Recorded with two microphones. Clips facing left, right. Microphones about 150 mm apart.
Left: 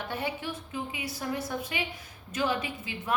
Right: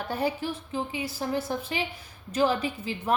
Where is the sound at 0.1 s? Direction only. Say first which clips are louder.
Right 7 dB; 35° right (ahead or behind).